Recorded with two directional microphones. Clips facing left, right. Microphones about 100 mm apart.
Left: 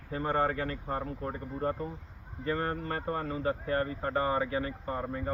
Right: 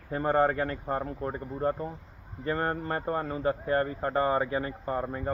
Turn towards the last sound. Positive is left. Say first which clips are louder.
# right 3 dB
turn(degrees=-35)  # may be behind; listen again after turning